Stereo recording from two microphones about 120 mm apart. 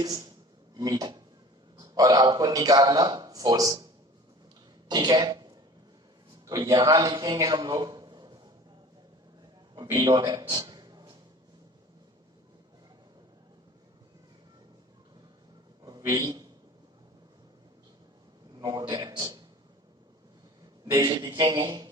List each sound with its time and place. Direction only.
0.0 s a sound: 30° right (ahead or behind)
1.7 s a man's voice: 30° right (ahead or behind)
4.9 s speech: 35° right (ahead or behind)
6.7 s a man's voice: 30° right (ahead or behind)
9.8 s speech: 30° right (ahead or behind)
10.5 s a sound: 30° right (ahead or behind)
15.8 s a sound: 30° right (ahead or behind)
18.6 s speech: 35° right (ahead or behind)
20.8 s speech: 30° right (ahead or behind)